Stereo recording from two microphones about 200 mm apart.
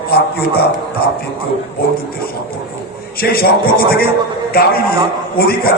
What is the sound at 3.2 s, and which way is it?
Speech, 50° left (ahead or behind).